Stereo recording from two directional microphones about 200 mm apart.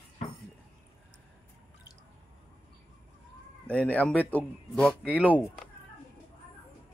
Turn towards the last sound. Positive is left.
turn(degrees=5)  # may be behind; listen again after turning